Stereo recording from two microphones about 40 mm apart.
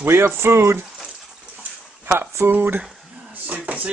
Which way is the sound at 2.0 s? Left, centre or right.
Right.